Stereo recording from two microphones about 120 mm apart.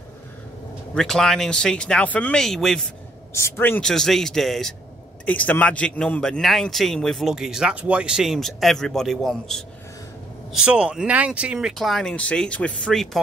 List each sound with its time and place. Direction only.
0.9 s a man's voice: 5° left (ahead or behind)
3.3 s a man's voice: 20° left (ahead or behind)
3.8 s a man's voice: 5° left (ahead or behind)
5.2 s a man's voice: 10° left (ahead or behind)
10.5 s a man's voice: 5° right (ahead or behind)